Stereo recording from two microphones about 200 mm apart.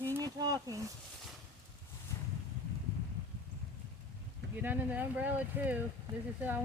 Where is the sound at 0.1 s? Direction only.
20° right (ahead or behind).